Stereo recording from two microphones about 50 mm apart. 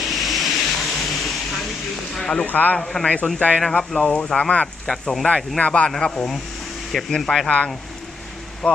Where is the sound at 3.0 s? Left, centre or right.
Left.